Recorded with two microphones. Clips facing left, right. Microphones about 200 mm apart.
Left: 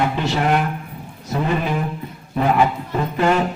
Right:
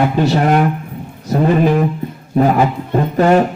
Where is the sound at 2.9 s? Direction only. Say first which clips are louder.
Right 8 dB; 45° right (ahead or behind).